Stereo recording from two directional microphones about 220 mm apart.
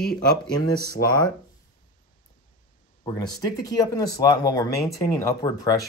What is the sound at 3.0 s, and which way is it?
Speech, 20° left (ahead or behind).